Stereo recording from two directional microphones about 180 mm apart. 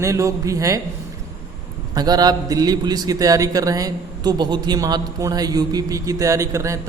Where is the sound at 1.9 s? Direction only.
20° right (ahead or behind).